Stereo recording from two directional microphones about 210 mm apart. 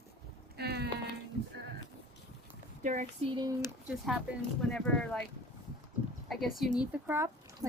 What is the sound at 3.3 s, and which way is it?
Speech, 20° right (ahead or behind).